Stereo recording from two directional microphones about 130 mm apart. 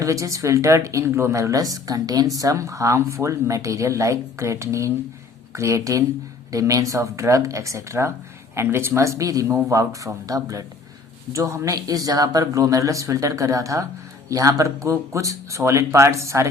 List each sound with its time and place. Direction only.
0.0 s speech: 25° right (ahead or behind)